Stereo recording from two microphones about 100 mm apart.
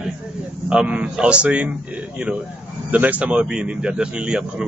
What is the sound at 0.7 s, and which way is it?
A man's voice, 10° right (ahead or behind).